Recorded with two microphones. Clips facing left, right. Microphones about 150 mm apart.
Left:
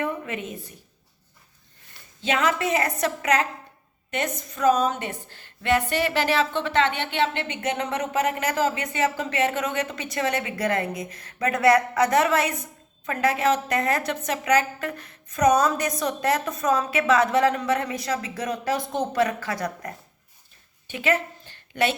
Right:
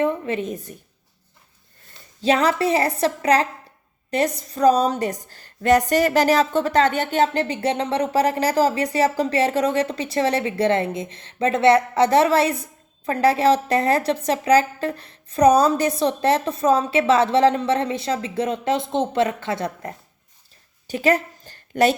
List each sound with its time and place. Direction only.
0.0 s a sound: 30° right (ahead or behind)
2.2 s a woman's voice: 35° right (ahead or behind)
20.8 s a woman's voice: 40° right (ahead or behind)